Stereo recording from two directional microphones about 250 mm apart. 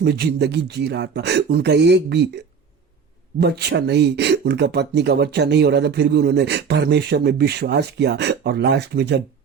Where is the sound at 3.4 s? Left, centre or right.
Right.